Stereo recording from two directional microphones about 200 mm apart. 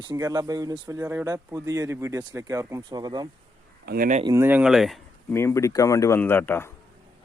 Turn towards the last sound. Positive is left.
turn(degrees=10)  # may be behind; listen again after turning